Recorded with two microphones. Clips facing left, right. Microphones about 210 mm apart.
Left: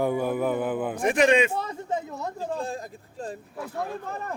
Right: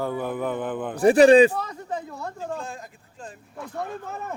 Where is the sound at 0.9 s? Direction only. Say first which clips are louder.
Right 8 dB; 35° right (ahead or behind).